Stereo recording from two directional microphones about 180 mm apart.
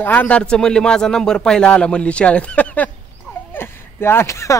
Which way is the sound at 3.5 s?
15° left (ahead or behind).